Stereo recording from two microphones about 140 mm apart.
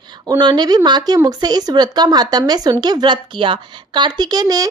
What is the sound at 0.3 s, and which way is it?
A woman's voice, 30° right (ahead or behind).